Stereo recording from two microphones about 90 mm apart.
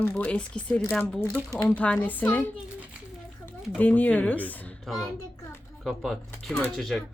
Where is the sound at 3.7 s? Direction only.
20° left (ahead or behind).